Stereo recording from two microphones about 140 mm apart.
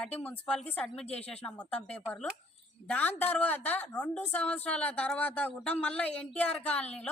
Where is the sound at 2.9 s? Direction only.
15° left (ahead or behind).